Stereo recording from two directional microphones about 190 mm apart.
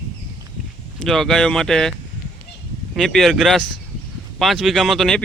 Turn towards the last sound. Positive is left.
turn(degrees=0)  # may be behind; listen again after turning